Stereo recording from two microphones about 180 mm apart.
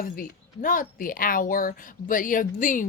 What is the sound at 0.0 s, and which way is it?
A woman's voice, 50° left (ahead or behind).